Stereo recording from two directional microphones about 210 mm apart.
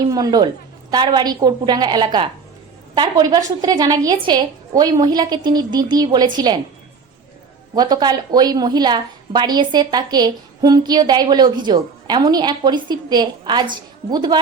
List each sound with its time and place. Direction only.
0.0 s a woman's voice: 20° right (ahead or behind)
7.8 s a woman's voice: 20° right (ahead or behind)